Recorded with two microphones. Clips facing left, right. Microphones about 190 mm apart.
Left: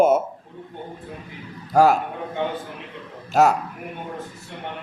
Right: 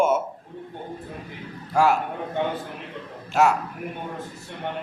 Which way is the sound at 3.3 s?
40° left (ahead or behind).